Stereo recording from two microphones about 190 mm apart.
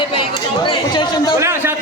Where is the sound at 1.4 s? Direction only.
15° right (ahead or behind).